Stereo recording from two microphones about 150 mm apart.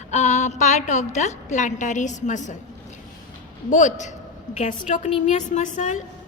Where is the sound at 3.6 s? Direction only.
55° left (ahead or behind).